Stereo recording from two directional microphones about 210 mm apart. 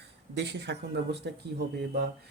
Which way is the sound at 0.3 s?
55° right (ahead or behind).